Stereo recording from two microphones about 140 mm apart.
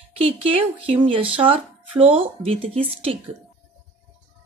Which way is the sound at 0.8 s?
40° right (ahead or behind).